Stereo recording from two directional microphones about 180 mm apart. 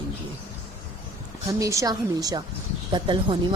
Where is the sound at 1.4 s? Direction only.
15° right (ahead or behind).